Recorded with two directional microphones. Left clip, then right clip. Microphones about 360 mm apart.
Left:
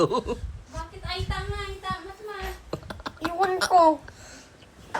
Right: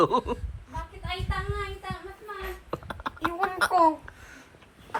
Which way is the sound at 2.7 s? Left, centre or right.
Centre.